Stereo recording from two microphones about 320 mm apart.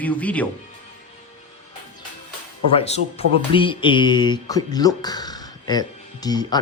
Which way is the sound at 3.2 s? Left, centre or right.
Centre.